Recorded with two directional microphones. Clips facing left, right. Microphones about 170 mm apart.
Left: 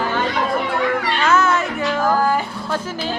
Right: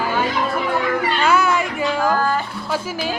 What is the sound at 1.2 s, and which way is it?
Music, 10° right (ahead or behind).